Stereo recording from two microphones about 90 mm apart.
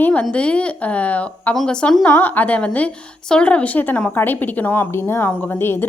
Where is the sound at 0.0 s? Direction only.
15° left (ahead or behind).